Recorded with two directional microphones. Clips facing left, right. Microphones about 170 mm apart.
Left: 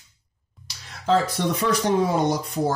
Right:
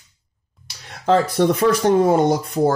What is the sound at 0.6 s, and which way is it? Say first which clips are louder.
Speech: right 5 dB; 55° right (ahead or behind).